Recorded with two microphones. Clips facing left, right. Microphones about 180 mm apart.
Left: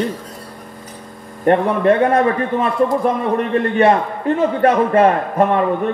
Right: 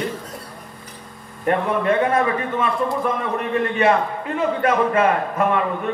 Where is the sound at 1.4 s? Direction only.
40° left (ahead or behind).